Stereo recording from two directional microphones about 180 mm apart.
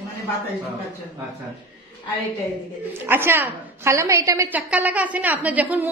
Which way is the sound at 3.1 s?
10° right (ahead or behind).